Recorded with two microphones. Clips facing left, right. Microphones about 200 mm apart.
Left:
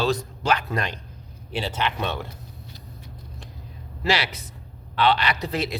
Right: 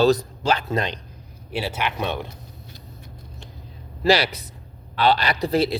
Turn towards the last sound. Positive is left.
turn(degrees=-35)  # may be behind; listen again after turning